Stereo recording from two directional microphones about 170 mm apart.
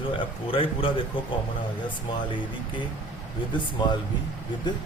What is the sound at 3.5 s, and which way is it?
Speech, 25° left (ahead or behind).